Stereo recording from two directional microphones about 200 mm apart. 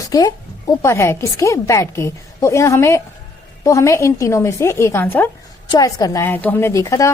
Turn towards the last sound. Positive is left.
turn(degrees=15)  # may be behind; listen again after turning